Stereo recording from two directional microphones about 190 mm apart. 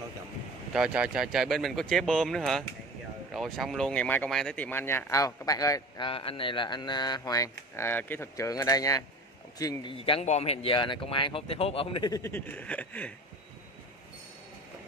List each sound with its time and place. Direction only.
0.7 s speech: 5° right (ahead or behind); by 9.9 s 20° left (ahead or behind)
9.9 s speech: 30° left (ahead or behind); by 13.1 s 5° left (ahead or behind)